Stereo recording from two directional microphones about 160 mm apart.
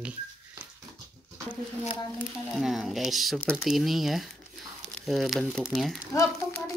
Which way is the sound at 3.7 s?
Centre (ahead or behind).